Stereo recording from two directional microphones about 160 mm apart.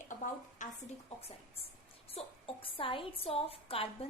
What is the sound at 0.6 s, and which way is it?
Speech, 50° left (ahead or behind).